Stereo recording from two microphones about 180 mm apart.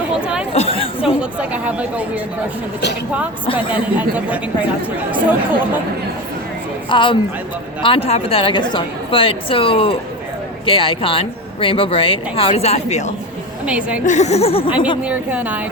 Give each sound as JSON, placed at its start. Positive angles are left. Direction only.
{"t": 0.2, "sound": "a sound", "side_deg": -5}
{"t": 0.5, "sound": "chatter", "side_deg": 35}
{"t": 1.0, "sound": "speech", "side_deg": -5}
{"t": 3.7, "sound": "speech", "side_deg": -10}
{"t": 6.9, "sound": "a woman's voice", "side_deg": 25}
{"t": 13.7, "sound": "speech", "side_deg": -5}
{"t": 14.0, "sound": "speech", "side_deg": 40}
{"t": 15.0, "sound": "speech", "side_deg": -5}